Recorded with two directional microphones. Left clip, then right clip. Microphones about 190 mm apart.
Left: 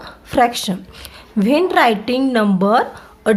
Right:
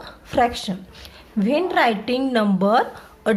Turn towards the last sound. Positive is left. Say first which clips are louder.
# left 3 dB
turn(degrees=15)  # may be behind; listen again after turning